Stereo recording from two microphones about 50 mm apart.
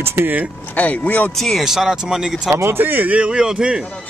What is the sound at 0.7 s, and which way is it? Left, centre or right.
Speech, left.